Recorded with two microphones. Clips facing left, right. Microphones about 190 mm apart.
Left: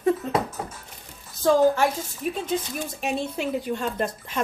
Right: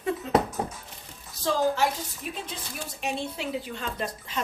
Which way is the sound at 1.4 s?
50° left (ahead or behind).